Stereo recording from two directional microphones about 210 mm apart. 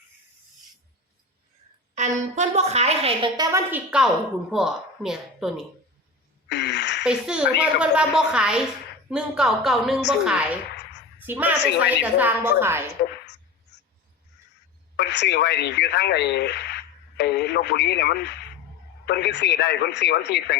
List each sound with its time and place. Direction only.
2.0 s a woman's voice: 35° right (ahead or behind); by 5.6 s centre (ahead or behind)
6.5 s a sound: 55° left (ahead or behind)
7.0 s a woman's voice: 5° right (ahead or behind)
14.9 s speech: 55° left (ahead or behind)